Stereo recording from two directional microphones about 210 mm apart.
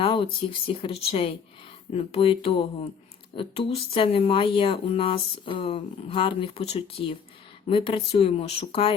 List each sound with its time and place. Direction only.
0.0 s speech: 25° left (ahead or behind)